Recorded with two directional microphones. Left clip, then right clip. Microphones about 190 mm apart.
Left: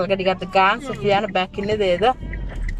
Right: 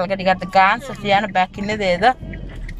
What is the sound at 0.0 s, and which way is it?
Speech, 10° left (ahead or behind).